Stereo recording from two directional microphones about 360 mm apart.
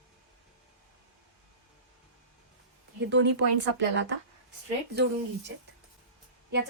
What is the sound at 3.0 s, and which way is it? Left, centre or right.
A woman's voice, right.